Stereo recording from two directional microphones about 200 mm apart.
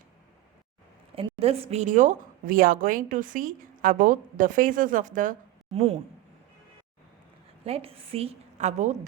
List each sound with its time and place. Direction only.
1.1 s a woman's voice: 30° right (ahead or behind)
7.6 s a woman's voice: 30° right (ahead or behind)